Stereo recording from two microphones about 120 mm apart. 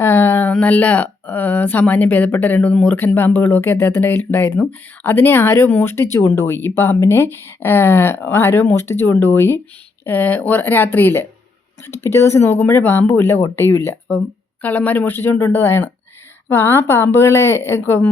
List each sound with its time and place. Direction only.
0.0 s speech: 20° left (ahead or behind)